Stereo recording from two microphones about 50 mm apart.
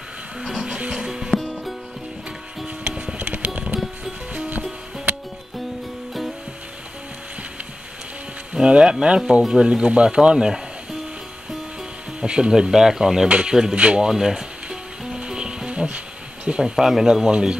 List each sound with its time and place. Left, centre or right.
0.6 s music: centre
1.4 s music: centre
3.2 s music: right
8.5 s speech: centre
12.2 s speech: centre
13.7 s speech: right
14.0 s music: centre
16.4 s speech: centre
16.7 s speech: centre